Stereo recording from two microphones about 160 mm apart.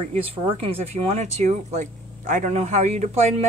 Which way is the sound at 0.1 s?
40° right (ahead or behind).